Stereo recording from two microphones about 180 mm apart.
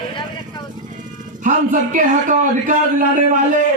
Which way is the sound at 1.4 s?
45° right (ahead or behind).